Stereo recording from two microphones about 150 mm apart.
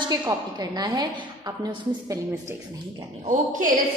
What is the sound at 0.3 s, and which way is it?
A woman's voice, 25° right (ahead or behind).